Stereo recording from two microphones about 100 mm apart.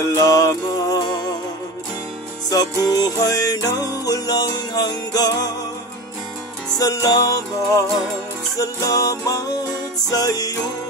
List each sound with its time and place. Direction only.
0.1 s music: 35° left (ahead or behind)
2.5 s music: 40° left (ahead or behind)
6.8 s music: 35° left (ahead or behind)